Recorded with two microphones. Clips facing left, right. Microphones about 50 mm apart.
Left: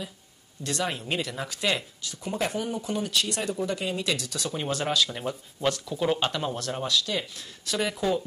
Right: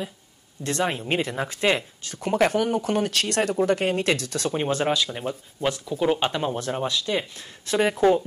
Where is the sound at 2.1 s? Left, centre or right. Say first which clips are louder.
Right 8 dB; right.